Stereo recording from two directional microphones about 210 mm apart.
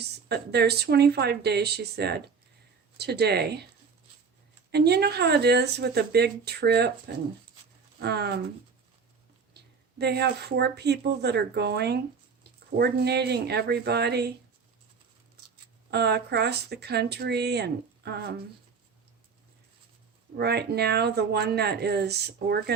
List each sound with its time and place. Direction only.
0.0 s speech: 50° right (ahead or behind)
4.7 s speech: 50° right (ahead or behind)
7.9 s speech: 50° right (ahead or behind)
10.0 s speech: 50° right (ahead or behind)
15.9 s speech: 50° right (ahead or behind)
20.3 s speech: 50° right (ahead or behind)